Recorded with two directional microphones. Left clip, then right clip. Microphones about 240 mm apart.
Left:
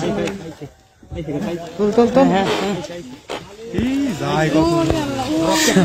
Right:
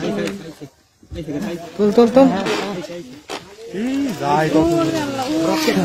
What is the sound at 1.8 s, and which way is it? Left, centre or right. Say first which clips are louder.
Speech: right 2 dB; right.